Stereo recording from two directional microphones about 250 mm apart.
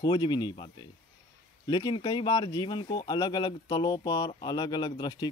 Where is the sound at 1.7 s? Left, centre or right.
Centre.